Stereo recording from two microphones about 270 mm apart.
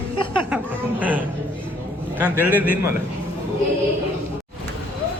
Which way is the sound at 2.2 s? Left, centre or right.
Centre.